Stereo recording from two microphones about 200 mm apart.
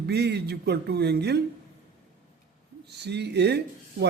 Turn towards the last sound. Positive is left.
turn(degrees=-55)  # may be behind; listen again after turning